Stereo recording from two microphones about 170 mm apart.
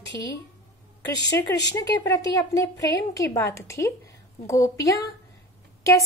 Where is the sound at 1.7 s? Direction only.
20° left (ahead or behind).